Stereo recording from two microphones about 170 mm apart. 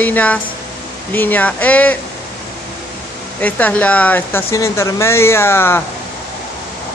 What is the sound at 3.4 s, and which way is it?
Speech, 10° left (ahead or behind).